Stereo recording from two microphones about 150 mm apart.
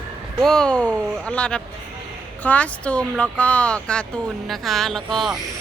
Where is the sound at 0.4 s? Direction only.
5° left (ahead or behind).